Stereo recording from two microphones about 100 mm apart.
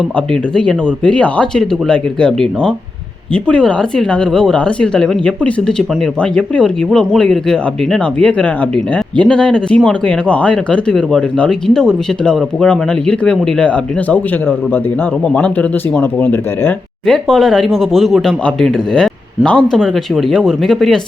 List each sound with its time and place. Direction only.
0.5 s speech: 10° left (ahead or behind)
16.0 s speech: 20° left (ahead or behind)
17.1 s speech: 5° left (ahead or behind)